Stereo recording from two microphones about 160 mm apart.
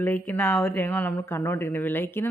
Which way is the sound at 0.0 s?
15° left (ahead or behind).